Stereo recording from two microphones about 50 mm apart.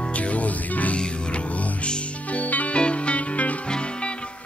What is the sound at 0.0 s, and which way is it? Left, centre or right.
Music, left.